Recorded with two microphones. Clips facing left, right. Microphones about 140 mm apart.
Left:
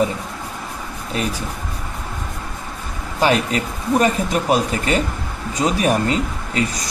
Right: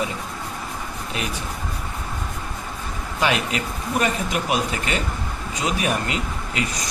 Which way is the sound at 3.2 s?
40° left (ahead or behind).